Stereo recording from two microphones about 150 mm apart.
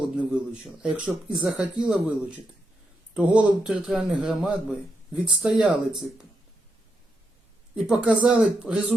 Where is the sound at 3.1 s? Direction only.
5° right (ahead or behind).